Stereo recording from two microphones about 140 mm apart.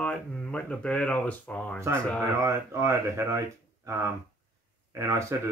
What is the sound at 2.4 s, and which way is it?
Speech, 20° right (ahead or behind).